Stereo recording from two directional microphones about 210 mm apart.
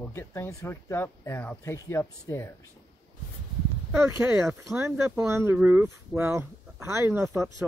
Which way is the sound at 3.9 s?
10° right (ahead or behind).